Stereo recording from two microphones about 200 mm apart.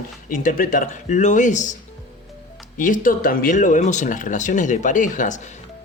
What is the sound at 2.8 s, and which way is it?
Speech, 40° left (ahead or behind).